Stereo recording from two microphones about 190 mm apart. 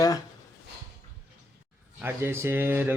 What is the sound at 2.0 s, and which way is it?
Speech, 10° right (ahead or behind).